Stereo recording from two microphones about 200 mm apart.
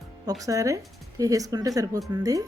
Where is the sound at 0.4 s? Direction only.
15° right (ahead or behind).